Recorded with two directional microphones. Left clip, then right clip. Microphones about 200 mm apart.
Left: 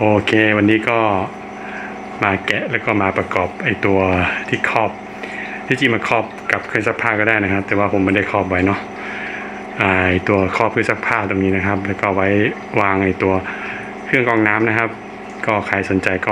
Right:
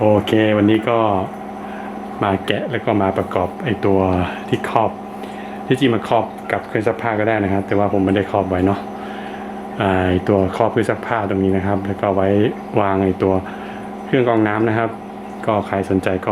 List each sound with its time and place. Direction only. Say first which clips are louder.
0.0 s speech: left 1 dB; 5° right (ahead or behind)
2.2 s speech: left 2 dB; 5° right (ahead or behind)